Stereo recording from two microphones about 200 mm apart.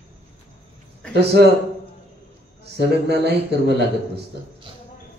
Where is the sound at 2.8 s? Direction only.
55° right (ahead or behind).